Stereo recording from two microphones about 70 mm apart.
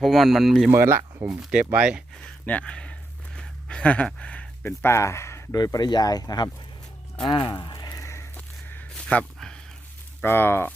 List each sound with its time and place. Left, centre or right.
0.0 s speech: centre
0.7 s speech: right
1.3 s speech: centre
2.2 s speech: centre
3.3 s a sound: centre
4.6 s speech: left
5.5 s speech: left
7.7 s a sound: left
8.4 s walk: left
9.0 s a sound: centre
10.2 s speech: left